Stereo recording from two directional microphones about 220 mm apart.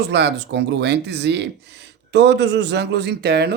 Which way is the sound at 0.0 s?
50° right (ahead or behind).